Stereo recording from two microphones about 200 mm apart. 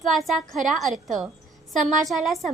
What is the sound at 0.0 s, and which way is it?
A woman's voice, centre (ahead or behind).